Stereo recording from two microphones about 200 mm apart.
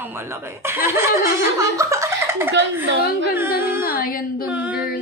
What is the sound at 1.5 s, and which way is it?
Chuckle, 15° right (ahead or behind).